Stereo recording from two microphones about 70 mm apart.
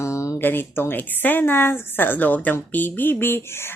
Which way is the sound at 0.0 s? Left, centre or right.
Left.